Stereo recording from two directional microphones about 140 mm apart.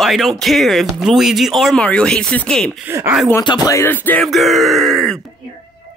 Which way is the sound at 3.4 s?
25° left (ahead or behind).